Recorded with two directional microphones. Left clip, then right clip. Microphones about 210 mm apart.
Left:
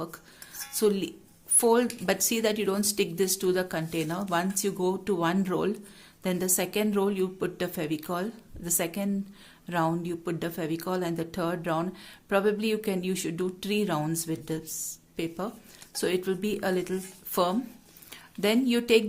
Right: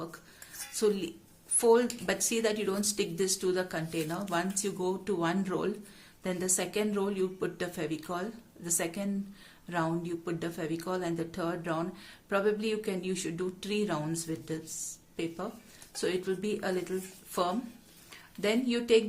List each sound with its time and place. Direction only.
0.7 s speech: 40° left (ahead or behind)